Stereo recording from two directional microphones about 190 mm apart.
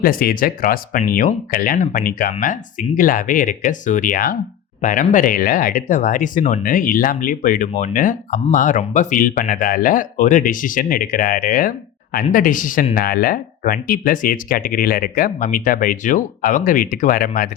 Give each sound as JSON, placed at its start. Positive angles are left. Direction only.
{"t": 0.0, "sound": "speech", "side_deg": 50}